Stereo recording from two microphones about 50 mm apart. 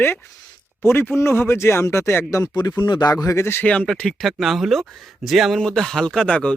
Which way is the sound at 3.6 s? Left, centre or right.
Left.